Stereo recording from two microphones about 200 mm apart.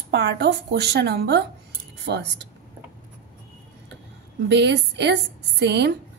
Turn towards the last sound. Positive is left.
turn(degrees=-60)  # may be behind; listen again after turning